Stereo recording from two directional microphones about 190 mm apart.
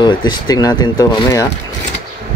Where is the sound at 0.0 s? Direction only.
25° left (ahead or behind).